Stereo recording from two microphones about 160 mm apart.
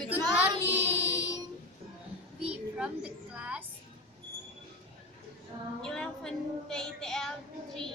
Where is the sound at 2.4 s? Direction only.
5° right (ahead or behind).